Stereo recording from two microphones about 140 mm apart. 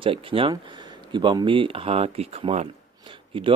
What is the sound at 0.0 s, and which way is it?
Speech, 40° right (ahead or behind).